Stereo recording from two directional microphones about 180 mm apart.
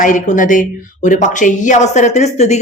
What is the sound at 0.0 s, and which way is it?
A woman's voice, 45° left (ahead or behind).